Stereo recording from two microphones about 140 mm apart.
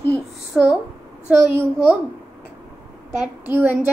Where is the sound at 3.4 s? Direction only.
15° right (ahead or behind).